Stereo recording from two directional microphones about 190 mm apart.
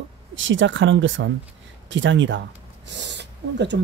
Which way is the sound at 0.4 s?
80° right.